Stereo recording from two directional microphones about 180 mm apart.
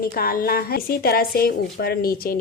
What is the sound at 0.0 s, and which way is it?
A woman's voice, 55° left (ahead or behind).